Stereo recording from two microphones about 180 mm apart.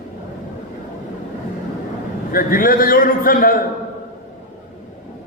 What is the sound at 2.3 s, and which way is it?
A man's voice, 50° left (ahead or behind).